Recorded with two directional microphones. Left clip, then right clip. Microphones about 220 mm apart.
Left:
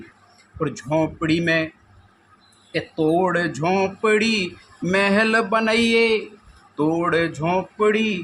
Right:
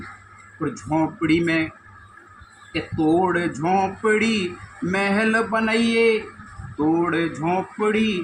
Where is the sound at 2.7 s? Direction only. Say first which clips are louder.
Even; 35° left (ahead or behind).